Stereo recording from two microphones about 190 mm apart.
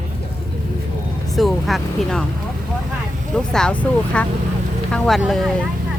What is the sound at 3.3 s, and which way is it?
Speech, 5° left (ahead or behind).